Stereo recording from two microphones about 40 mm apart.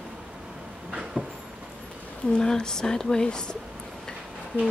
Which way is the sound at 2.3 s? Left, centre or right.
Centre.